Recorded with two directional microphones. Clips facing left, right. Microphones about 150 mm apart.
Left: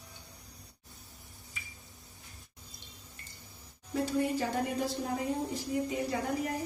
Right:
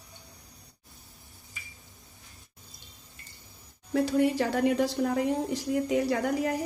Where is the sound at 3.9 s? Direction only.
75° right (ahead or behind).